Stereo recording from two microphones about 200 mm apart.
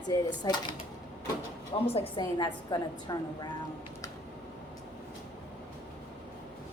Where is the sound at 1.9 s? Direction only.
25° left (ahead or behind).